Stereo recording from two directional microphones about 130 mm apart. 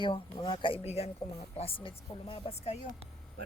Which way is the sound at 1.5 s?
45° left (ahead or behind).